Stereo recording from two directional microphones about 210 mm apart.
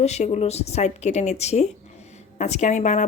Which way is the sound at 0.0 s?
30° left (ahead or behind).